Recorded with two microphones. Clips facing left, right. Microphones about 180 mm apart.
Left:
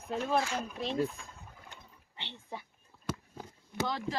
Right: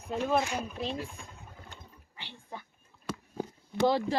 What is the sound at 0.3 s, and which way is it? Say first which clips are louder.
Speech: right 1 dB; 20° right (ahead or behind).